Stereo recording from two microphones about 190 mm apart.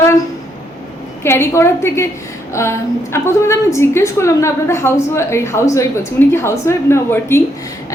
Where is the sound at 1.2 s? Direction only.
15° left (ahead or behind).